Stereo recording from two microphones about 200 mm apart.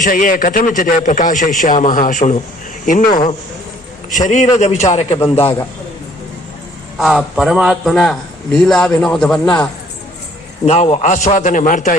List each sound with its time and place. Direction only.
0.0 s a man's voice: 40° left (ahead or behind)
3.1 s a man's voice: 20° left (ahead or behind)
4.2 s a man's voice: 40° left (ahead or behind)
7.0 s a man's voice: centre (ahead or behind)
10.7 s a man's voice: 30° left (ahead or behind)